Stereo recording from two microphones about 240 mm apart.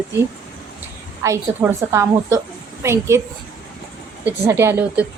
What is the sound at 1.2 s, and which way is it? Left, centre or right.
A woman's voice, centre.